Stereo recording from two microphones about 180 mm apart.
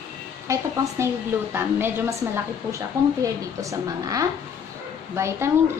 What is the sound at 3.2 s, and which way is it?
A woman's voice, 20° right (ahead or behind).